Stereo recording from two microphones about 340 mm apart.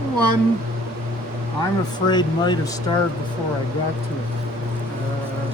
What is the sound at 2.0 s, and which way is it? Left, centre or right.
Speech, centre.